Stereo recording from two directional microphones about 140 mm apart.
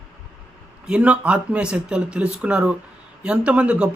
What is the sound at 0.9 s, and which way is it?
Speech, 10° right (ahead or behind).